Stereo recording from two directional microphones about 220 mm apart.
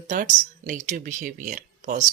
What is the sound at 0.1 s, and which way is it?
Speech, 35° right (ahead or behind).